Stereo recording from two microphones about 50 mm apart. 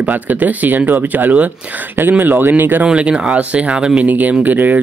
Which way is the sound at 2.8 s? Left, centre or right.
Right.